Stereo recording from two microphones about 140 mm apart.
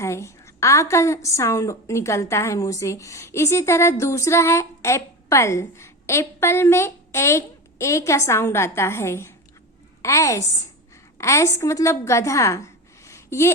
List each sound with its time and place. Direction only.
0.0 s a woman's voice: 20° left (ahead or behind)